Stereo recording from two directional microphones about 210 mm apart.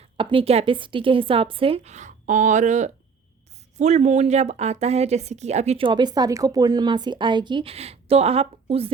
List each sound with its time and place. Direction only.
0.2 s a woman's voice: 25° right (ahead or behind)